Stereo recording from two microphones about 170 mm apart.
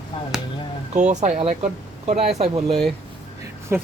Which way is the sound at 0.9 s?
45° right (ahead or behind).